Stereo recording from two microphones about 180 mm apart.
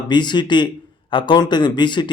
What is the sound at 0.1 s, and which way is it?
Speech, 25° left (ahead or behind).